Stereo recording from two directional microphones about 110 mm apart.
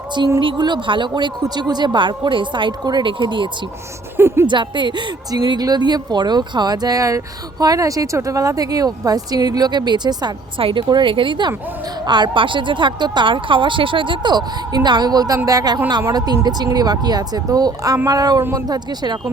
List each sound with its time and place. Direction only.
0.3 s a woman's voice: 45° right (ahead or behind)
10.6 s a woman's voice: 50° right (ahead or behind)